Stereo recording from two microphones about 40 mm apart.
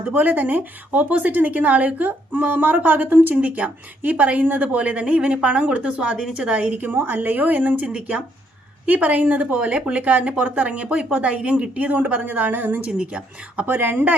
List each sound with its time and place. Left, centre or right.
0.2 s speech: right
3.3 s a woman's voice: right
7.1 s speech: right
8.9 s a woman's voice: right
10.4 s speech: right
10.7 s speech: right
11.8 s speech: right
12.9 s speech: right
13.7 s speech: right